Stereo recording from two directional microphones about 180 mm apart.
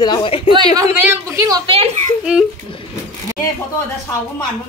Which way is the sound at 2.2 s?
5° right (ahead or behind).